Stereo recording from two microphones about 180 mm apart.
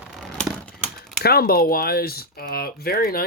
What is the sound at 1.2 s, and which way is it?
Speech, 55° left (ahead or behind).